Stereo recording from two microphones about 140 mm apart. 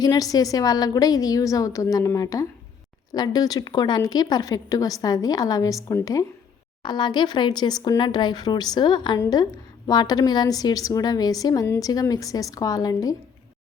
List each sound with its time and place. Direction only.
0.0 s speech: 25° left (ahead or behind)